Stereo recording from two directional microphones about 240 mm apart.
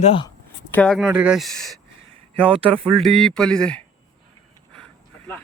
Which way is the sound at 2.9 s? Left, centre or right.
Centre.